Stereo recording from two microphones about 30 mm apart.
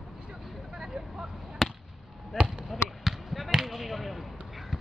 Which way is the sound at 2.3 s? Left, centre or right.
Centre.